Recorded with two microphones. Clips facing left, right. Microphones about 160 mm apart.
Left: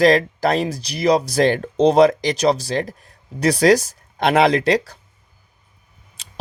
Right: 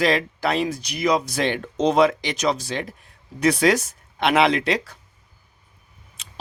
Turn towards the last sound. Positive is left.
turn(degrees=35)  # may be behind; listen again after turning